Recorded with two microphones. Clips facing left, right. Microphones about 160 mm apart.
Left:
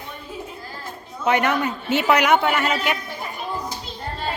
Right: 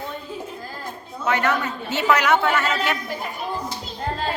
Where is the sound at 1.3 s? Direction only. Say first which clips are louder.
Left 2 dB; 20° left (ahead or behind).